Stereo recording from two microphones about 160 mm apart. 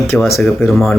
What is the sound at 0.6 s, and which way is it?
Speech, 15° left (ahead or behind).